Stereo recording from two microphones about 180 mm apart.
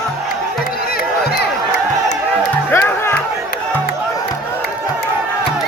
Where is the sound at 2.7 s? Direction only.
10° left (ahead or behind).